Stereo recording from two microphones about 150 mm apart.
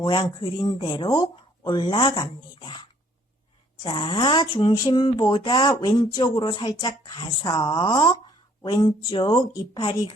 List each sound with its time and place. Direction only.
0.0 s speech: 35° left (ahead or behind)
3.9 s speech: 35° left (ahead or behind)